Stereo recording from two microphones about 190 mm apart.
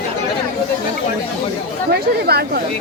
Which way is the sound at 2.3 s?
55° right (ahead or behind).